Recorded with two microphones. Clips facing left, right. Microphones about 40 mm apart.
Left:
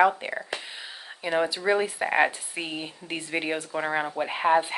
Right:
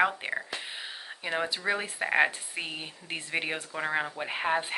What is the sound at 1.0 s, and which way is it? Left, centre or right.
Speech, centre.